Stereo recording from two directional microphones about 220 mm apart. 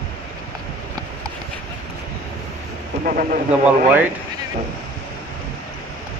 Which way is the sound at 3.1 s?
40° right (ahead or behind).